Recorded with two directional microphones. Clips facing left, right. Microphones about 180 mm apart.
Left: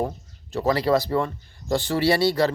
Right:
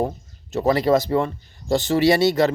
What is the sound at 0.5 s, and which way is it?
Speech, 20° right (ahead or behind).